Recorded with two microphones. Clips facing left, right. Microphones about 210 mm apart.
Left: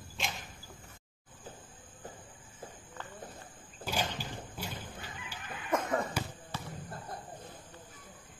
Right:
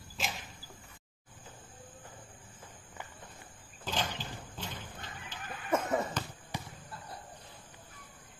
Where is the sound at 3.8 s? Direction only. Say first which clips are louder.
Left 1 dB; 10° left (ahead or behind).